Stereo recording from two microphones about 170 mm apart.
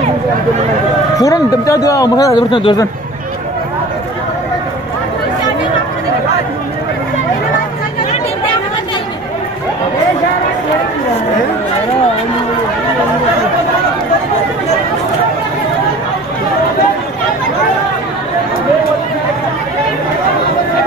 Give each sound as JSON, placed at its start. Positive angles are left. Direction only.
{"t": 1.1, "sound": "a man's voice", "side_deg": 20}